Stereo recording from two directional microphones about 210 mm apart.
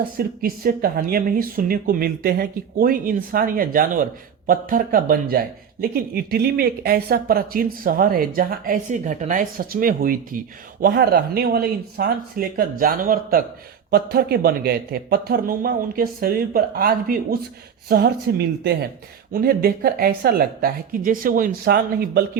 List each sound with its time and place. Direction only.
0.2 s speech: 45° right (ahead or behind)